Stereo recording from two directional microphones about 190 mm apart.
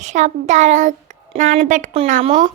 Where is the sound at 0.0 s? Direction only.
40° right (ahead or behind).